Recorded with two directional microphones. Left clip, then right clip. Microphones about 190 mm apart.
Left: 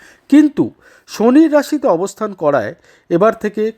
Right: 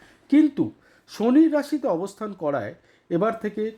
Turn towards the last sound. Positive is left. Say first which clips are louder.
# left 11 dB
turn(degrees=30)  # may be behind; listen again after turning